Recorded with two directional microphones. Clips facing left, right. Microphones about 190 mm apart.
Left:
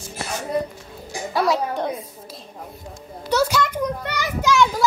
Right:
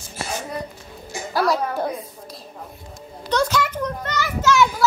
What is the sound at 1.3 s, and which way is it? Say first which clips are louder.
Speech: even; centre (ahead or behind).